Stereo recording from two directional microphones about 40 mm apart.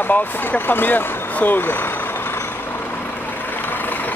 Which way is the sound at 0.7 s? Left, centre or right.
Left.